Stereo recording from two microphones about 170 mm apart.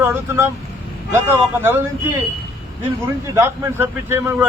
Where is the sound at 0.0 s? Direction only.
15° right (ahead or behind).